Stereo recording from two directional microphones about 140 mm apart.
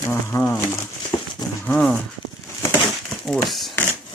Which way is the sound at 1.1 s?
30° left (ahead or behind).